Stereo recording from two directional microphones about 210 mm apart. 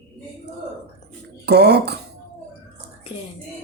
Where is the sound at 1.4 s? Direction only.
50° right (ahead or behind).